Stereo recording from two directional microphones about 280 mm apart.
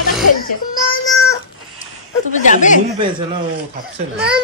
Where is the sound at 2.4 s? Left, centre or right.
Left.